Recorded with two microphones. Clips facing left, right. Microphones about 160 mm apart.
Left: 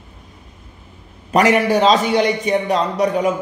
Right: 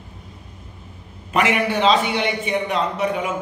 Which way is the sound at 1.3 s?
40° left (ahead or behind).